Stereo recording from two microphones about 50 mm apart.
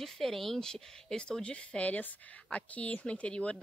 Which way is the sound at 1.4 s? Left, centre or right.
Left.